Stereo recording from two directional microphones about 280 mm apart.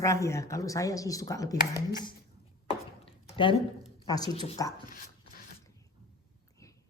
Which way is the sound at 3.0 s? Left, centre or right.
Centre.